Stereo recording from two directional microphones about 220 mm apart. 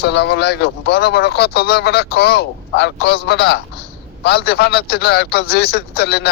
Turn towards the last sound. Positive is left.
turn(degrees=45)  # may be behind; listen again after turning